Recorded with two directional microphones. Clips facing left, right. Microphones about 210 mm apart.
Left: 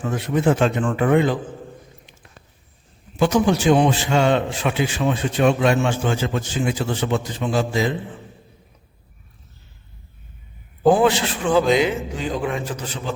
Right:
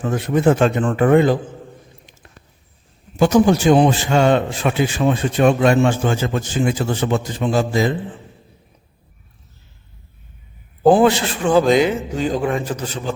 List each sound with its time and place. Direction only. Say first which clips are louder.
0.0 s a man's voice: right 3 dB; 45° right (ahead or behind)
3.2 s a man's voice: right 4 dB; 40° right (ahead or behind)
10.8 s a man's voice: right 3 dB; 35° right (ahead or behind)